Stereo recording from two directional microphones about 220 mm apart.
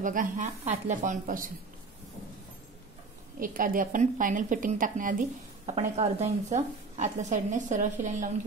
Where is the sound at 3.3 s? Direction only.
40° right (ahead or behind).